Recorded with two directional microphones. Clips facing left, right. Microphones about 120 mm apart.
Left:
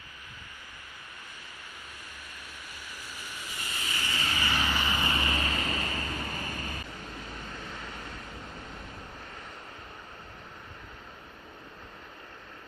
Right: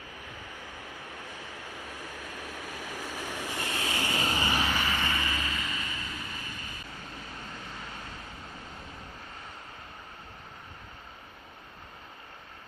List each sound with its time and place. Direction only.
1.7 s vehicle: 90° right; by 4.1 s 75° right (ahead or behind)
4.1 s vehicle: 40° right (ahead or behind)
4.4 s vehicle: 15° right (ahead or behind)
4.6 s vehicle: centre (ahead or behind)
4.9 s vehicle: 20° left (ahead or behind)
5.4 s vehicle: 45° left (ahead or behind)